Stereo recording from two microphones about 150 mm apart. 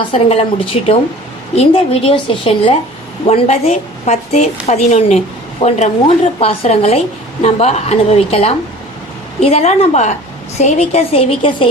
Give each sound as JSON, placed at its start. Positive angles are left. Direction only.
{"t": 0.1, "sound": "a woman's voice", "side_deg": 40}